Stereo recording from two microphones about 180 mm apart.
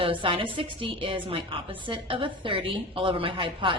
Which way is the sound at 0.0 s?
30° right (ahead or behind).